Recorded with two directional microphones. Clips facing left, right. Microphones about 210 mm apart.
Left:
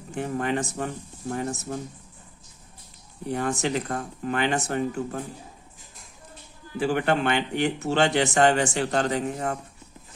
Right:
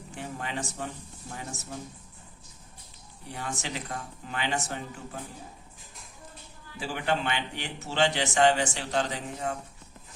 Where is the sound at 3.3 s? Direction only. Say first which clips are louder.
Left 10 dB; 50° left (ahead or behind).